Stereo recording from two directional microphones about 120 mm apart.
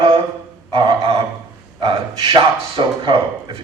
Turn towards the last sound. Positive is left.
turn(degrees=-45)  # may be behind; listen again after turning